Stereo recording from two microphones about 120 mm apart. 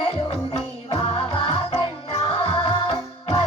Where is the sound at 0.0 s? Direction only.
50° left (ahead or behind).